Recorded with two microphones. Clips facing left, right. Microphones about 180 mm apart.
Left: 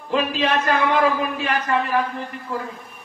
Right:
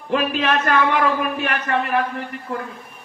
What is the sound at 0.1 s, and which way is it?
A man's voice, 65° right (ahead or behind).